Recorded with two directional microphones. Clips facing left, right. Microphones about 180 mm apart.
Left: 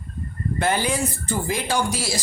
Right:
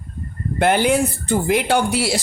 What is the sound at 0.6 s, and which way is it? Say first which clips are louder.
Speech: right 7 dB; 60° right (ahead or behind).